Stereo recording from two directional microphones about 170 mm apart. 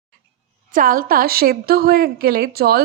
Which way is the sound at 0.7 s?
55° right (ahead or behind).